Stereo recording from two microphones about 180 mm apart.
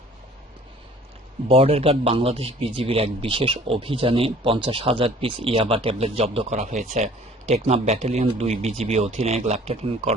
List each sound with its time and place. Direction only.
1.5 s a man's voice: 30° right (ahead or behind)